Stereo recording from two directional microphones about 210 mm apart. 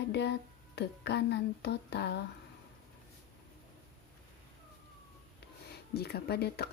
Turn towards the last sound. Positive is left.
turn(degrees=50)  # may be behind; listen again after turning